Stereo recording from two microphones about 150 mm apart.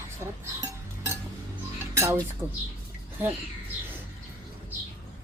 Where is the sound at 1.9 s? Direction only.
15° right (ahead or behind).